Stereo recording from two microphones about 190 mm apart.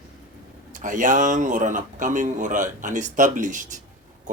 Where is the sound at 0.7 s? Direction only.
40° right (ahead or behind).